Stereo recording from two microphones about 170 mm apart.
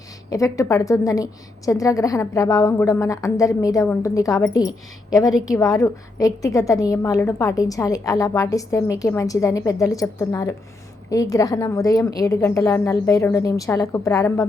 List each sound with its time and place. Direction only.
0.3 s a woman's voice: 20° left (ahead or behind)
5.5 s a woman's voice: 20° left (ahead or behind)